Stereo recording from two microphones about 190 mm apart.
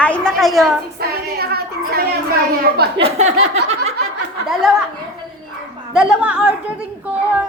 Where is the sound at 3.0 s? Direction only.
35° right (ahead or behind).